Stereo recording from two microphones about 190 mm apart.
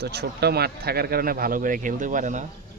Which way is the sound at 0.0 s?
60° right (ahead or behind).